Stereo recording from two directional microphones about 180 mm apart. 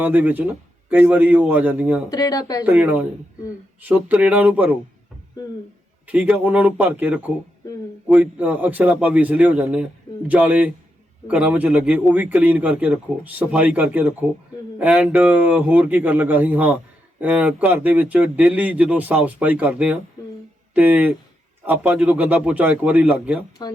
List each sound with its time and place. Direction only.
0.0 s a man's voice: 10° right (ahead or behind)
2.0 s speech: 20° left (ahead or behind)
2.6 s a man's voice: 10° right (ahead or behind)
6.1 s a man's voice: 10° right (ahead or behind)
23.6 s speech: 20° left (ahead or behind)